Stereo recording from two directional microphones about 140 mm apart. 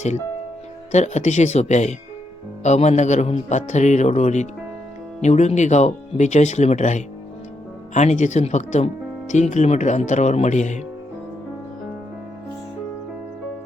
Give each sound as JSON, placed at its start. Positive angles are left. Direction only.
{"t": 0.9, "sound": "a man's voice", "side_deg": 55}